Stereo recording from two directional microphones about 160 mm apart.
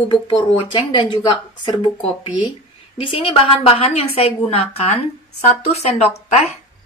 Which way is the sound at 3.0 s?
30° left (ahead or behind).